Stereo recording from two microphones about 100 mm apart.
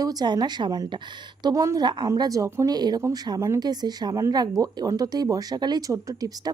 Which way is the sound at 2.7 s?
45° right (ahead or behind).